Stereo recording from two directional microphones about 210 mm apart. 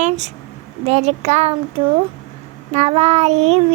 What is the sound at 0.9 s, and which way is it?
Child singing, 30° right (ahead or behind).